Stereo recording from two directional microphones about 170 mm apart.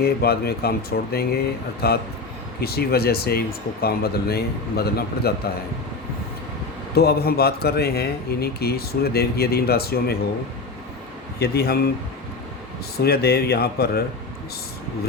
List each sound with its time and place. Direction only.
0.0 s a man's voice: 65° left (ahead or behind)
6.9 s a man's voice: 65° left (ahead or behind)
11.3 s a man's voice: 70° left (ahead or behind)
13.0 s a man's voice: 70° left (ahead or behind)